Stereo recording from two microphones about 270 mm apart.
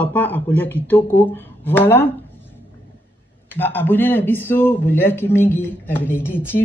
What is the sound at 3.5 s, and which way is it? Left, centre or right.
A woman's voice, centre.